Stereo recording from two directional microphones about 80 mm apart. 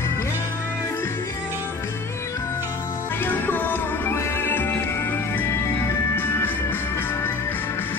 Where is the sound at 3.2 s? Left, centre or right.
Left.